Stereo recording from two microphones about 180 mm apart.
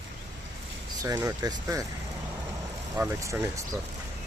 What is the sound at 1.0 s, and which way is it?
Speech, 20° right (ahead or behind).